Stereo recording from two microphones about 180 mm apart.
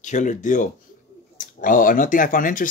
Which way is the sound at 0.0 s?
40° left (ahead or behind).